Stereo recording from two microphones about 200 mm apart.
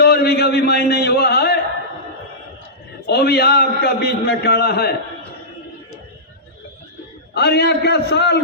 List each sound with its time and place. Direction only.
0.0 s a sound: 50° left (ahead or behind)
3.1 s a man's voice: 55° left (ahead or behind)
7.3 s a man's voice: 55° left (ahead or behind)